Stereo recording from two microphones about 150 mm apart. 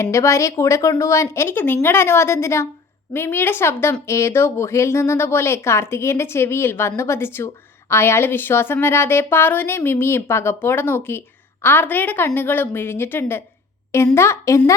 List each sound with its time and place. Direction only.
0.0 s a woman's voice: 20° left (ahead or behind)